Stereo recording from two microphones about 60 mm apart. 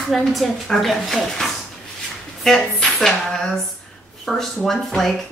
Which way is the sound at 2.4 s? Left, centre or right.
Centre.